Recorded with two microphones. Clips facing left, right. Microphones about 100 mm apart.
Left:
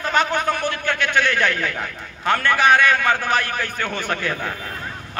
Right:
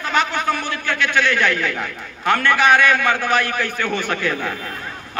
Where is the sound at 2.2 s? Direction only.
35° left (ahead or behind).